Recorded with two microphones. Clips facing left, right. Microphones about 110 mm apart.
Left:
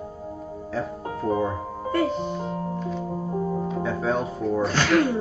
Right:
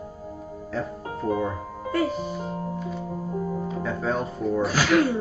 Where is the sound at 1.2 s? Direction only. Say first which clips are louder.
Left 1 dB; 30° left (ahead or behind).